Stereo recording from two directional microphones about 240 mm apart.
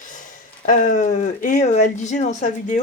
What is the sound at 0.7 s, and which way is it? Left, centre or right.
Speech, left.